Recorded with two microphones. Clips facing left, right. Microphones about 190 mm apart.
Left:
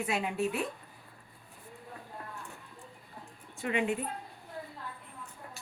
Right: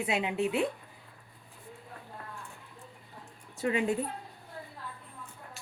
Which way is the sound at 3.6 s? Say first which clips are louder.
Right 2 dB; 35° right (ahead or behind).